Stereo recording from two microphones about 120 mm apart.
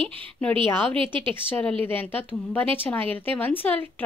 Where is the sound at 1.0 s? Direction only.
45° right (ahead or behind).